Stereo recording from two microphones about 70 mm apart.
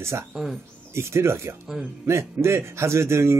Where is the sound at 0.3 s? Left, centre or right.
Centre.